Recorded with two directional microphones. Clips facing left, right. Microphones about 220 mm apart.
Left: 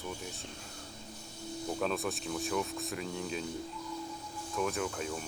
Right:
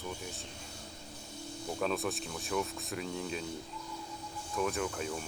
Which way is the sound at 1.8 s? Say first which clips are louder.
Right 2 dB; centre (ahead or behind).